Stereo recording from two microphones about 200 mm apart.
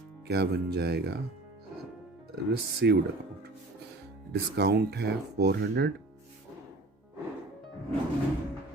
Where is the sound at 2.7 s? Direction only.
55° right (ahead or behind).